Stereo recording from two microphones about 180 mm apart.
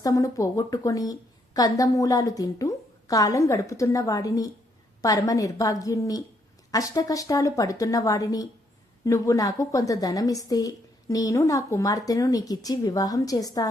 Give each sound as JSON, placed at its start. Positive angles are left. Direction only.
{"t": 0.0, "sound": "a woman's voice", "side_deg": 20}